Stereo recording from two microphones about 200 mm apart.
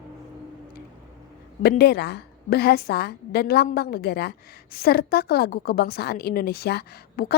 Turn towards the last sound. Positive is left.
turn(degrees=50)  # may be behind; listen again after turning